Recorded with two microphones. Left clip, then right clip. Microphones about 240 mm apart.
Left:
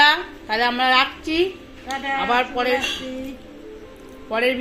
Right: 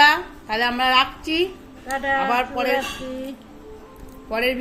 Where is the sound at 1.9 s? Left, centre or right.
Right.